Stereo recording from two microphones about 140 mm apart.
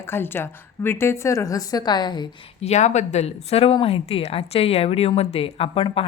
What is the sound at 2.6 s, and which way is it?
Speech, 55° left (ahead or behind).